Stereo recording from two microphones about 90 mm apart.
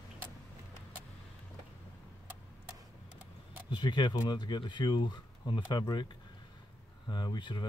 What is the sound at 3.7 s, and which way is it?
Speech, 55° left (ahead or behind).